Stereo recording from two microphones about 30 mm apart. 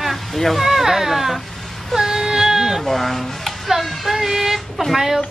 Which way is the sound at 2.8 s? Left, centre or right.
Centre.